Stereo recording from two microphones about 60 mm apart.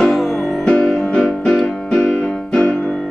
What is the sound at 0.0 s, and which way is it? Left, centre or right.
Music, centre.